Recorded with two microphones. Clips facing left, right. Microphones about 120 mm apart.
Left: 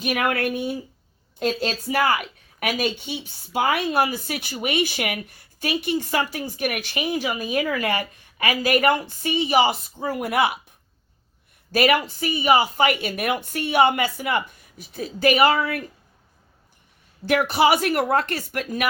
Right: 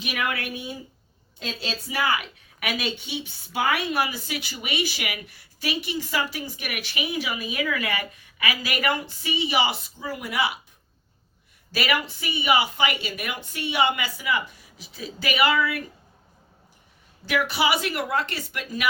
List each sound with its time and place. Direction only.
0.0 s a woman's voice: 45° left (ahead or behind)
11.7 s speech: 45° left (ahead or behind)
17.2 s speech: 50° left (ahead or behind)